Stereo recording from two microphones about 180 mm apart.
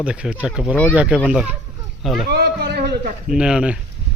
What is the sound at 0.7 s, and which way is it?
Speech, 10° left (ahead or behind).